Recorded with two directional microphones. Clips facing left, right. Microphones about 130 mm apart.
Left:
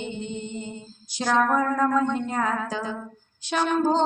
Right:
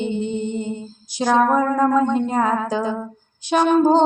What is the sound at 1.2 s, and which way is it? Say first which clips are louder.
Music: right 5 dB; 15° right (ahead or behind).